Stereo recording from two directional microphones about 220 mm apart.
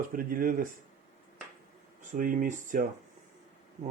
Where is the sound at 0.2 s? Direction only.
40° right (ahead or behind).